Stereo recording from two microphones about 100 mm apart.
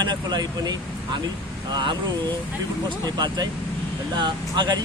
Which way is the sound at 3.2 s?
45° right (ahead or behind).